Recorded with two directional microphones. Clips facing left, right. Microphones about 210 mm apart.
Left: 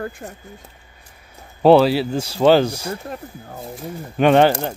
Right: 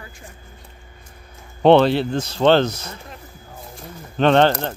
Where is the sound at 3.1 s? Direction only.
55° left (ahead or behind).